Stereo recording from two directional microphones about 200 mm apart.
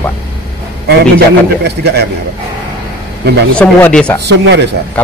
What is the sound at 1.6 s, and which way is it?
Speech, 55° right (ahead or behind).